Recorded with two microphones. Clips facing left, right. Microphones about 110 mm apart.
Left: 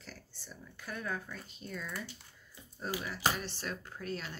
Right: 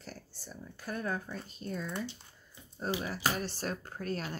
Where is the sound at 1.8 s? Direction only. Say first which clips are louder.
Right 5 dB; 25° right (ahead or behind).